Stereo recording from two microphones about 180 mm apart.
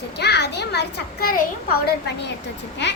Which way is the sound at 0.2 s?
65° left (ahead or behind).